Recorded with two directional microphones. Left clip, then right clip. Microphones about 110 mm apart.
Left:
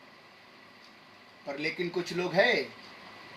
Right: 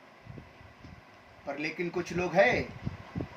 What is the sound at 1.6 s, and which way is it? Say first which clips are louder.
Speech: left 2 dB; 15° right (ahead or behind).